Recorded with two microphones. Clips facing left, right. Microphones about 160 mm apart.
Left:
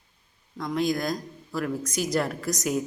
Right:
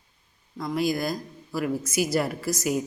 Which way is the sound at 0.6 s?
5° right (ahead or behind).